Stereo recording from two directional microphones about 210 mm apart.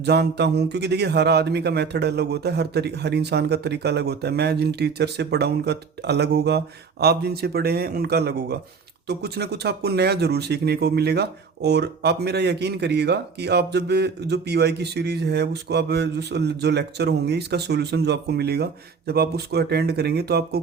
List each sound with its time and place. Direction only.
0.0 s speech: 50° right (ahead or behind)